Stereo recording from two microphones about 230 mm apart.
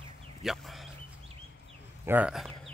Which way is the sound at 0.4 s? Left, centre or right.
Centre.